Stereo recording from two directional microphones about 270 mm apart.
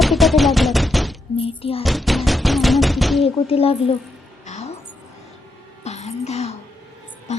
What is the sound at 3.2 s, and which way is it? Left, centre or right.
Speech, left.